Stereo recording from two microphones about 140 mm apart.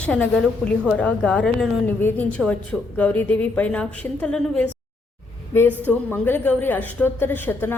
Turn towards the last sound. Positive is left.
turn(degrees=15)  # may be behind; listen again after turning